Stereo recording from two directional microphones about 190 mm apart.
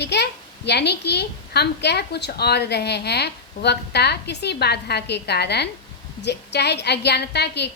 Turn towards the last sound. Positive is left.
turn(degrees=60)  # may be behind; listen again after turning